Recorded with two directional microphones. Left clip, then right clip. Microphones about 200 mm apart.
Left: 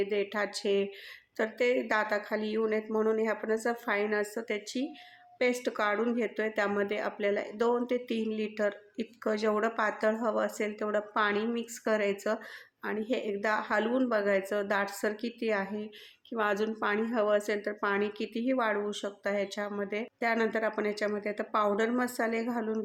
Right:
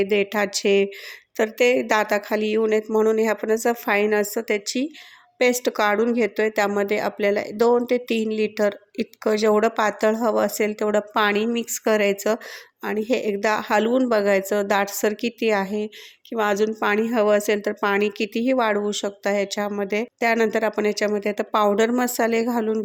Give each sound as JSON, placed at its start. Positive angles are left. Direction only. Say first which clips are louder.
{"t": 0.0, "sound": "a woman's voice", "louder": "right 10 dB", "side_deg": -40}